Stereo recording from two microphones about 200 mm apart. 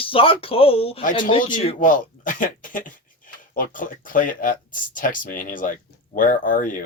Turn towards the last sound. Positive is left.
turn(degrees=40)  # may be behind; listen again after turning